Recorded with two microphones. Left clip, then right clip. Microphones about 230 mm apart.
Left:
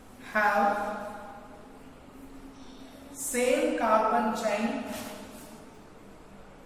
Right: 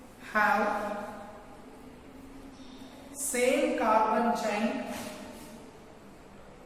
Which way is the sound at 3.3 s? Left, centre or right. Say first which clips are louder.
Even; centre.